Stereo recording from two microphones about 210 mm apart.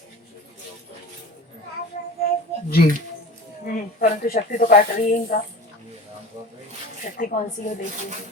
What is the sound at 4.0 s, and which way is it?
Speech, 45° left (ahead or behind).